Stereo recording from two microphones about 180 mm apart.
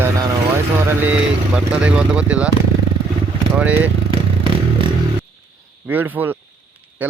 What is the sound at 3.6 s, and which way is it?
Speech, 10° right (ahead or behind).